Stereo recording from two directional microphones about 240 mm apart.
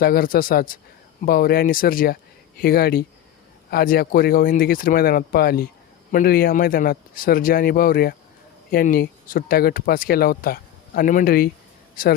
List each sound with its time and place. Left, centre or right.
0.0 s speech: left